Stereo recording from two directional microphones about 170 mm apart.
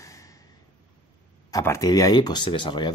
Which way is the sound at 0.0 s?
20° left (ahead or behind).